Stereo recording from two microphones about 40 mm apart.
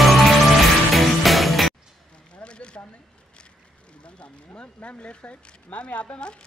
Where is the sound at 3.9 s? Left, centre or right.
Left.